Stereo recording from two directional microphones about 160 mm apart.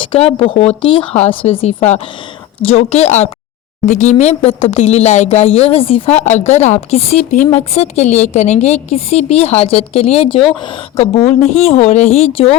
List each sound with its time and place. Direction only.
0.0 s a woman's voice: 35° left (ahead or behind)